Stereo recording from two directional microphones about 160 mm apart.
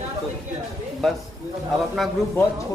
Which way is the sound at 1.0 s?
Centre (ahead or behind).